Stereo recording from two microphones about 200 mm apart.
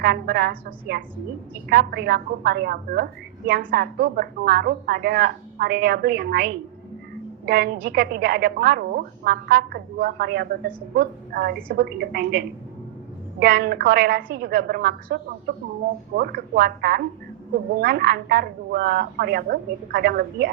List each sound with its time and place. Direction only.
0.0 s a woman's voice: 50° right (ahead or behind)